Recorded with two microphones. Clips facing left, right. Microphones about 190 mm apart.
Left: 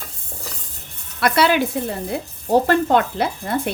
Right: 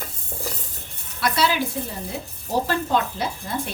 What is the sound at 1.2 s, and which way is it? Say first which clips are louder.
A woman's voice: left 5 dB; 60° left (ahead or behind).